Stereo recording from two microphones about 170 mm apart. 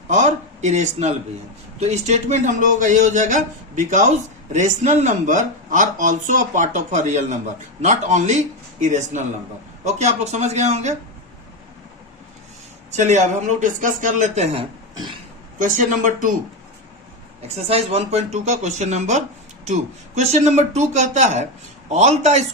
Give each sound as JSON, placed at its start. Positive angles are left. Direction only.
{"t": 0.1, "sound": "speech", "side_deg": -45}
{"t": 13.0, "sound": "speech", "side_deg": -45}
{"t": 15.5, "sound": "speech", "side_deg": -50}
{"t": 17.5, "sound": "speech", "side_deg": -35}